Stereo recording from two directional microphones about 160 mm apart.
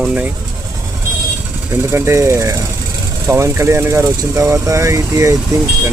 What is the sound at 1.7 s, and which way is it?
Speech, 15° right (ahead or behind).